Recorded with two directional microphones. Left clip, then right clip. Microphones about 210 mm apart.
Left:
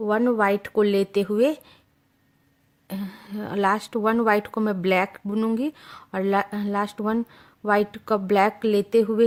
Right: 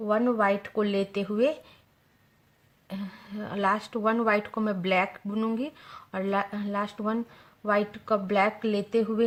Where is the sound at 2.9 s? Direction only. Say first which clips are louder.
Left 4 dB; 45° left (ahead or behind).